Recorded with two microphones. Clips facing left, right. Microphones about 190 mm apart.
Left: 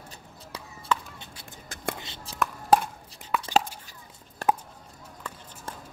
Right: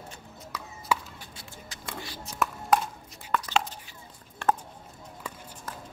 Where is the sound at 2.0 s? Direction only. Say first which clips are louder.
Right 3 dB; 25° left (ahead or behind).